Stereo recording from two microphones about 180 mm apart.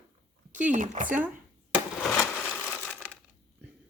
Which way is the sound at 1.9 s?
10° left (ahead or behind).